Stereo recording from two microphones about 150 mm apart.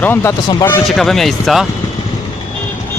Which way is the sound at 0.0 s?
15° left (ahead or behind).